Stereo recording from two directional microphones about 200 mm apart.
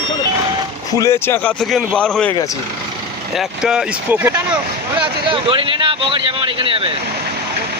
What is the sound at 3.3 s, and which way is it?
Speech, 5° right (ahead or behind).